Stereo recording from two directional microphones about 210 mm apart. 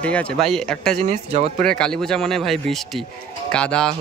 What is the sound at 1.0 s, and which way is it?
Speech, 30° right (ahead or behind).